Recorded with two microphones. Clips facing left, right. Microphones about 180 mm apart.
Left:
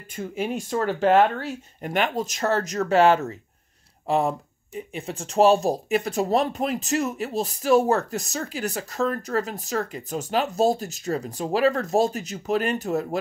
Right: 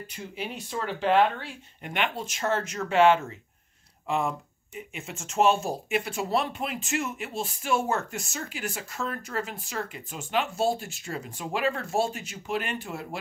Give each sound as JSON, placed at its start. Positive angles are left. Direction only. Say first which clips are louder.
{"t": 0.1, "sound": "speech", "louder": "left 11 dB", "side_deg": 50}